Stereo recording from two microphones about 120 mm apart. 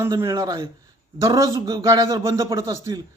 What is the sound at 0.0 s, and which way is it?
A man's voice, 25° right (ahead or behind).